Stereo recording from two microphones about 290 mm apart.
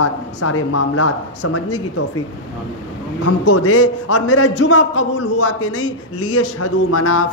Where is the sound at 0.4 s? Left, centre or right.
Left.